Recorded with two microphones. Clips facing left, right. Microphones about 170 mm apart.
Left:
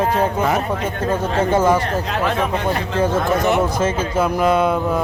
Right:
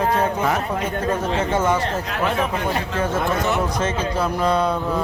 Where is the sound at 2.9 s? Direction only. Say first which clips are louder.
Left 6 dB; 30° left (ahead or behind).